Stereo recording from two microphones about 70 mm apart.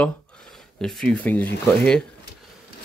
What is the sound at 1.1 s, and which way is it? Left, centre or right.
Speech, left.